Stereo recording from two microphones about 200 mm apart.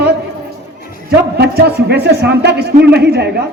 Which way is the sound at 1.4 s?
55° right (ahead or behind).